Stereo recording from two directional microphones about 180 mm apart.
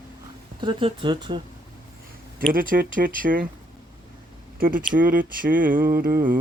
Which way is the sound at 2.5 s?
50° right (ahead or behind).